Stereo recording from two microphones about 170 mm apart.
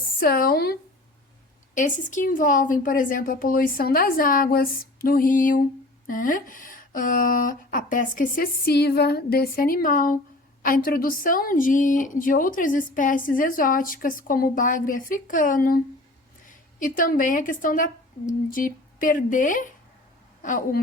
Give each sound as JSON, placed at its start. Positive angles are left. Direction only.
{"t": 0.2, "sound": "speech", "side_deg": 60}
{"t": 1.7, "sound": "a woman's voice", "side_deg": 50}